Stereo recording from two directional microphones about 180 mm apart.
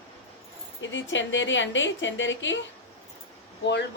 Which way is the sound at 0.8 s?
90° left.